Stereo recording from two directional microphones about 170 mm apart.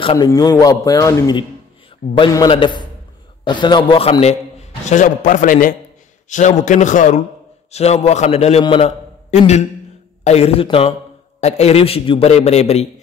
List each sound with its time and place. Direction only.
0.0 s a man's voice: 30° left (ahead or behind)